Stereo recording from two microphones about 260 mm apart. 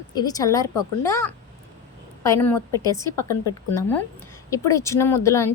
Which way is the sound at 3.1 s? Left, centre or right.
Right.